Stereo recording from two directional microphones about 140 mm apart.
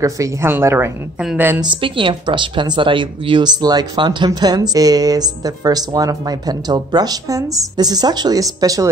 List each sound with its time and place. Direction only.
0.0 s a woman's voice: 20° right (ahead or behind)
1.6 s speech: 35° right (ahead or behind)